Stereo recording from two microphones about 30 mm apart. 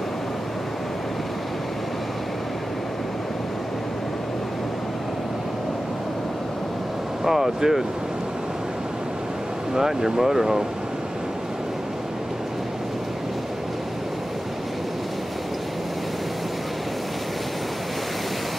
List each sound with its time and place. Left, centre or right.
7.2 s speech: centre
9.8 s speech: centre